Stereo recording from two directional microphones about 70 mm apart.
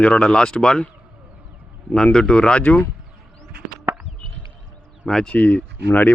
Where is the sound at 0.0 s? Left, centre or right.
Centre.